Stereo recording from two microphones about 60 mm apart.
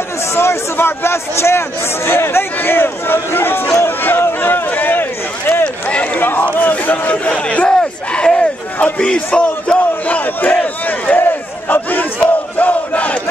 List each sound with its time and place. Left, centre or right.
0.3 s a man's voice: left
5.6 s run: left
6.2 s battle cry: left
8.7 s crowd: left
9.0 s battle cry: centre